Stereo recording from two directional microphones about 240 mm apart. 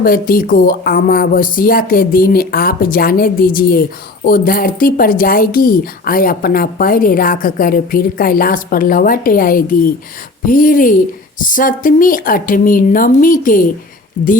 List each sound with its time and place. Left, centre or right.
0.0 s speech: left